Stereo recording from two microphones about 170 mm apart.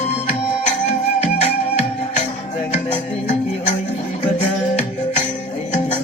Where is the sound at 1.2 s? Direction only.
40° left (ahead or behind).